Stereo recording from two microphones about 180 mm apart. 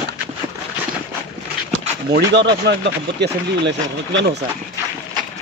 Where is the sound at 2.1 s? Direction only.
70° right (ahead or behind).